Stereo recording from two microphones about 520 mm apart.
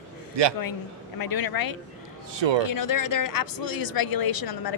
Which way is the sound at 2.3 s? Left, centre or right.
Right.